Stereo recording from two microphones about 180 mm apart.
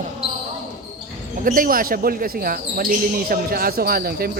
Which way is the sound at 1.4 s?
50° right (ahead or behind).